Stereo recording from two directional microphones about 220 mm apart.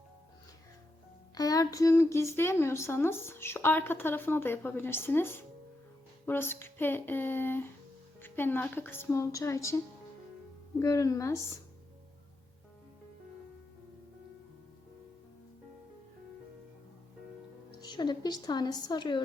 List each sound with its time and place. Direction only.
1.4 s speech: 15° left (ahead or behind)
17.7 s a woman's voice: 20° left (ahead or behind)